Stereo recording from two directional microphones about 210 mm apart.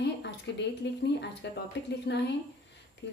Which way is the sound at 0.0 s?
55° left (ahead or behind).